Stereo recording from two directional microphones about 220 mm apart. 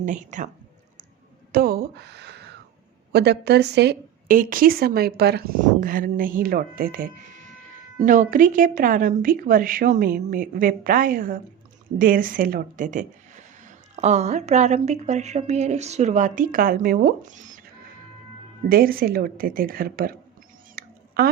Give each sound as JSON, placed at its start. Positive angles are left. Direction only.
{"t": 0.0, "sound": "speech", "side_deg": -35}
{"t": 1.5, "sound": "speech", "side_deg": -45}
{"t": 18.7, "sound": "speech", "side_deg": -40}
{"t": 20.8, "sound": "a sound", "side_deg": -45}